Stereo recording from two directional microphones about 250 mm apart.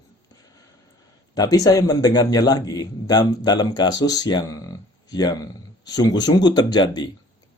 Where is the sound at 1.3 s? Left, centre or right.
Centre.